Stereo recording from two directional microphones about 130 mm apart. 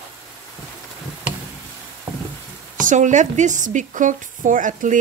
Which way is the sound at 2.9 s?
70° right (ahead or behind).